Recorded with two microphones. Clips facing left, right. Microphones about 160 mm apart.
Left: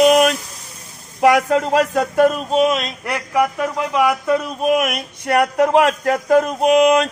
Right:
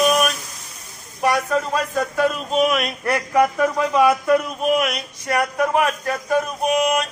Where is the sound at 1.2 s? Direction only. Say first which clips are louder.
Left 6 dB; 90° left.